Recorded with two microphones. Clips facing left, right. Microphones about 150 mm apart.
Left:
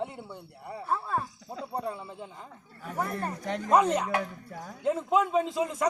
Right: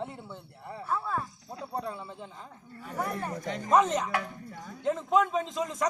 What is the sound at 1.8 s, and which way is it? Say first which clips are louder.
Speech: left 2 dB; 5° left (ahead or behind).